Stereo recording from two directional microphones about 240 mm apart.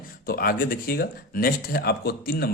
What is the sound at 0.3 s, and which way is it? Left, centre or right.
Speech, left.